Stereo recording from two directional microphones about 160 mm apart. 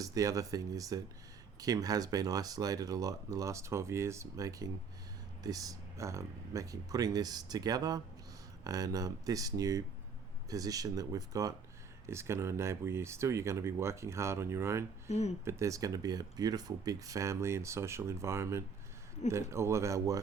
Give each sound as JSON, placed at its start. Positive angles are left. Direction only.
{"t": 0.0, "sound": "speech", "side_deg": -20}